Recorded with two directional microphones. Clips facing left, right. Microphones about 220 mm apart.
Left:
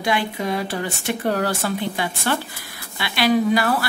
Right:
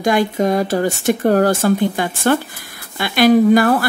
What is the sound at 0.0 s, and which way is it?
Speech, 45° right (ahead or behind).